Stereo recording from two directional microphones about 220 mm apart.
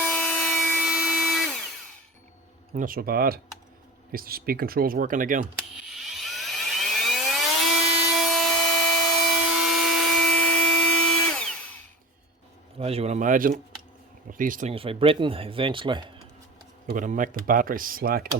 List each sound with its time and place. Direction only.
0.0 s tools: 5° left (ahead or behind)
2.7 s speech: 40° right (ahead or behind)
5.9 s helicopter: centre (ahead or behind)
9.6 s drill: centre (ahead or behind)
12.8 s speech: 30° right (ahead or behind)
14.7 s speech: 25° right (ahead or behind)
16.8 s speech: 35° right (ahead or behind)